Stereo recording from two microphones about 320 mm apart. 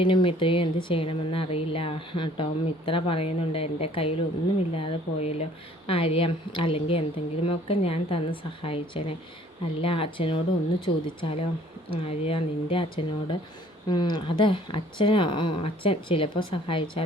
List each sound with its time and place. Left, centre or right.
0.0 s speech: centre